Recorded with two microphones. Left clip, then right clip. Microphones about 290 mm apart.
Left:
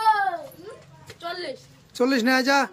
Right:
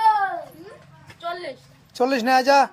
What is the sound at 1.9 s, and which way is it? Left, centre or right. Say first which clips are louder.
Speech: right 3 dB; centre.